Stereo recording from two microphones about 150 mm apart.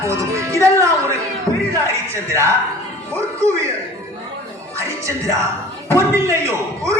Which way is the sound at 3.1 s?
20° right (ahead or behind).